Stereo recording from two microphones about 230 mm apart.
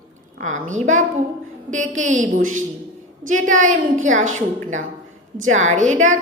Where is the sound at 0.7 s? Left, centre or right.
Right.